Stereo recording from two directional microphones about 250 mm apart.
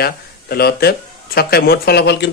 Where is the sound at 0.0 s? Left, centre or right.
Left.